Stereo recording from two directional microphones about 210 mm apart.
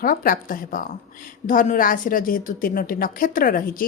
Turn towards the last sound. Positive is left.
turn(degrees=40)  # may be behind; listen again after turning